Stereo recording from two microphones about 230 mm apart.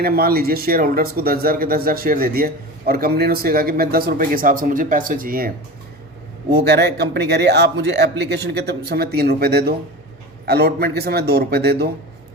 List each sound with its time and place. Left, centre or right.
0.0 s speech: right
6.5 s a man's voice: right